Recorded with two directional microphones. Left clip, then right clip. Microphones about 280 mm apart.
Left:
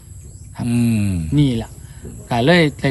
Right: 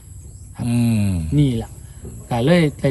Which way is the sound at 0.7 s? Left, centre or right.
Centre.